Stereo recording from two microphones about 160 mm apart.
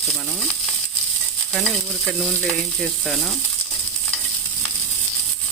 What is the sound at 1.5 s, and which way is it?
Ratchet, 5° left (ahead or behind).